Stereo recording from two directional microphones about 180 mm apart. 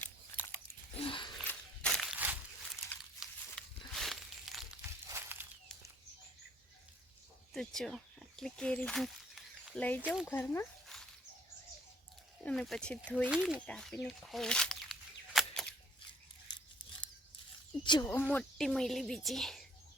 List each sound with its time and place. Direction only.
0.0 s biting: 10° left (ahead or behind)
1.0 s a sound: 25° left (ahead or behind)
1.5 s a sound: 5° left (ahead or behind)
5.0 s walk: 10° right (ahead or behind)
7.5 s a sound: centre (ahead or behind)
10.0 s speech: 5° right (ahead or behind)
10.2 s speech: 15° left (ahead or behind)
10.8 s dog: centre (ahead or behind)
12.5 s speech: 5° left (ahead or behind)
13.3 s speech: 5° right (ahead or behind)
13.7 s a sound: 5° left (ahead or behind)
16.5 s scissors: 25° left (ahead or behind)
17.8 s speech: 25° left (ahead or behind)
18.1 s speech: 10° left (ahead or behind)